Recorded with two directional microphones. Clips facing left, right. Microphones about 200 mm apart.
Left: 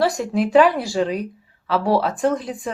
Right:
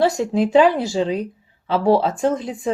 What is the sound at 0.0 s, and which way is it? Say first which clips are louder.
Speech: right 2 dB; 25° right (ahead or behind).